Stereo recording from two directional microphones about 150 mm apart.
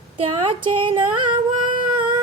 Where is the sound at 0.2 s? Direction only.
35° right (ahead or behind).